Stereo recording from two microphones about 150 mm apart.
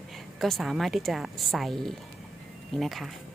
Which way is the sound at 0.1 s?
Centre (ahead or behind).